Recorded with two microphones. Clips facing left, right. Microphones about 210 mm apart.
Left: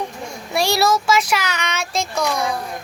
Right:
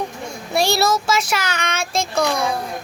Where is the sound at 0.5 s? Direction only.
25° right (ahead or behind).